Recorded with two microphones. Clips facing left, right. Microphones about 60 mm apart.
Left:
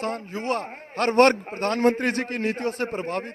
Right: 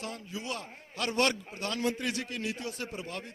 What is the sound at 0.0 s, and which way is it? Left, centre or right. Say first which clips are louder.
A man's voice: left 10 dB; left.